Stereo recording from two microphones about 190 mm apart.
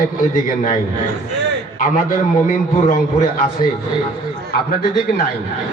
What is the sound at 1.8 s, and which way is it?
Speech, 45° left (ahead or behind).